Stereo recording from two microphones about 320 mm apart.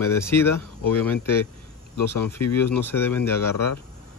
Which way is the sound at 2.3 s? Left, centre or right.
Centre.